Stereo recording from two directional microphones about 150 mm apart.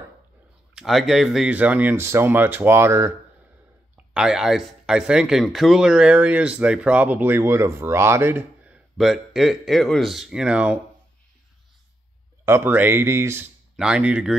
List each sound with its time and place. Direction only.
0.7 s speech: centre (ahead or behind); by 3.1 s 15° right (ahead or behind)
3.9 s speech: 5° right (ahead or behind)
12.4 s speech: 15° right (ahead or behind)